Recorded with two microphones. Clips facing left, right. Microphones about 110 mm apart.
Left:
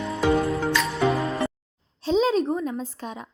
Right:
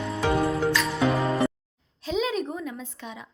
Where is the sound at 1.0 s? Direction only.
30° right (ahead or behind).